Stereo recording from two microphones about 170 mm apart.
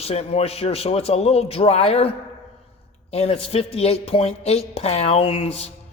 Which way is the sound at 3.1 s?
35° left (ahead or behind).